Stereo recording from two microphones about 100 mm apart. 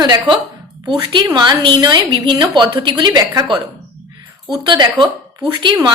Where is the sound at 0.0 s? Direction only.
45° right (ahead or behind).